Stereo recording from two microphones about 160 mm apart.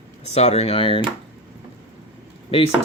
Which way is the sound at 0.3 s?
40° left (ahead or behind).